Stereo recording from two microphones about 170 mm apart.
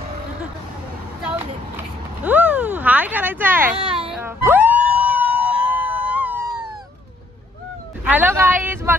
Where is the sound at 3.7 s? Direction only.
30° right (ahead or behind).